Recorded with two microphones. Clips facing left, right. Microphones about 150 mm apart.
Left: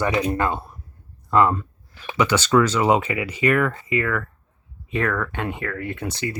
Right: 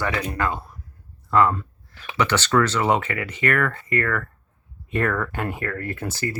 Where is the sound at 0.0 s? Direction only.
20° left (ahead or behind).